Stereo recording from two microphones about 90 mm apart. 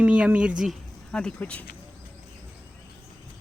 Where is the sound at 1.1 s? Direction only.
10° left (ahead or behind).